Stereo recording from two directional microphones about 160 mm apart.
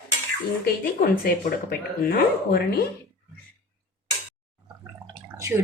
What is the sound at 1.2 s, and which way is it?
Speech, 70° left (ahead or behind).